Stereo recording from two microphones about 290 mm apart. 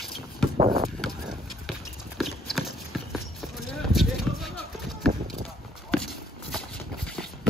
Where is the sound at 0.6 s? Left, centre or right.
Centre.